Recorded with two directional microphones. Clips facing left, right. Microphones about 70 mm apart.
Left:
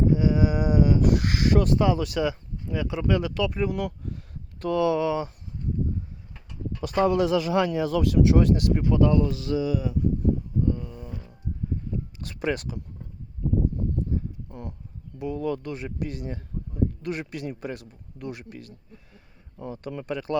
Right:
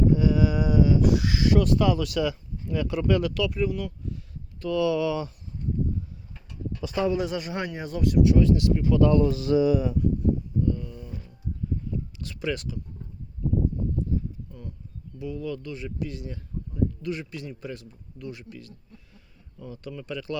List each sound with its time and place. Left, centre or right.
0.1 s a sound: left
2.7 s speech: centre; by 3.7 s left
3.7 s speech: left
4.6 s speech: left
6.7 s speech: left
7.2 s speech: left
8.9 s speech: left
9.2 s speech: centre
10.6 s a sound: left
11.1 s a sound: left
14.5 s speech: left
15.2 s speech: left
19.5 s speech: left